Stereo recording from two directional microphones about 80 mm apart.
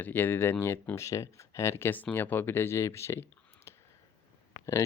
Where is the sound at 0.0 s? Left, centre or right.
Left.